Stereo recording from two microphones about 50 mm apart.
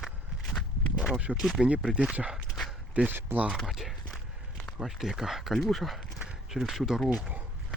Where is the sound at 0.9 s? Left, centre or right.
Centre.